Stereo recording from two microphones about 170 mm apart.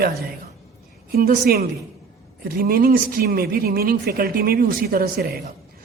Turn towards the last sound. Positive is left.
turn(degrees=-65)  # may be behind; listen again after turning